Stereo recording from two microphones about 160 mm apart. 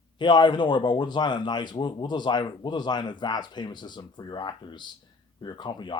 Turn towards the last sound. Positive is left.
turn(degrees=30)  # may be behind; listen again after turning